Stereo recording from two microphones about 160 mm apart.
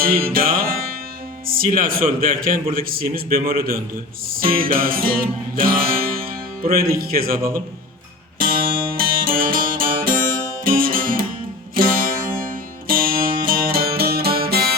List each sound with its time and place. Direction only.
0.3 s music: 70° right (ahead or behind)
1.5 s a man's voice: 60° right (ahead or behind)
4.3 s music: 65° right (ahead or behind)
9.0 s music: 65° right (ahead or behind)